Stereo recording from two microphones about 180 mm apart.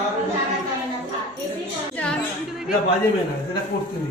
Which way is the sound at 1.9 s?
5° left (ahead or behind).